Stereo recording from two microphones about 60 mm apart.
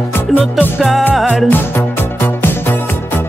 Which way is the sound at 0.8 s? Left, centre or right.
Centre.